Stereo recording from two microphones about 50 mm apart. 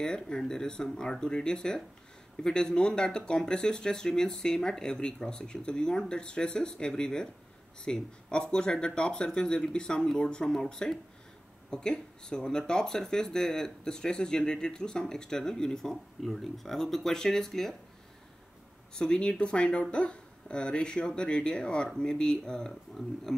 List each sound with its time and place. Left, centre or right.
0.0 s speech: centre
18.9 s speech: centre